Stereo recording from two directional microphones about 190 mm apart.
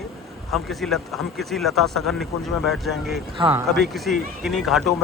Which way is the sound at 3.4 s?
25° right (ahead or behind).